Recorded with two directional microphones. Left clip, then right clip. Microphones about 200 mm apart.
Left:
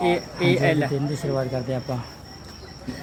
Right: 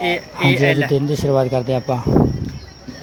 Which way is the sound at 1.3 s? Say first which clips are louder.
Right 10 dB; 30° right (ahead or behind).